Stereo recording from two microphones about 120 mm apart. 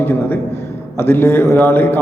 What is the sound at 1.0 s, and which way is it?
Speech, 20° left (ahead or behind).